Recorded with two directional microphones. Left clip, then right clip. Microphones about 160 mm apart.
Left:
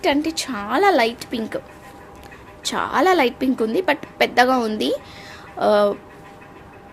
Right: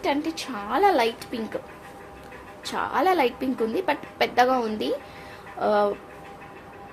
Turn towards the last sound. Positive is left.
turn(degrees=55)  # may be behind; listen again after turning